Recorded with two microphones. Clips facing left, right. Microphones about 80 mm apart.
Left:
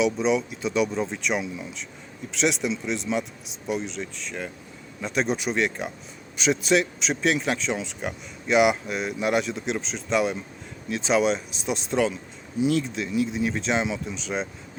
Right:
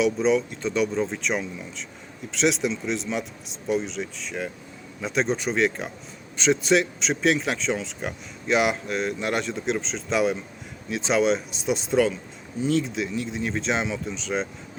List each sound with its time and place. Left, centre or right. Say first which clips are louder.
0.0 s speech: right 1 dB; centre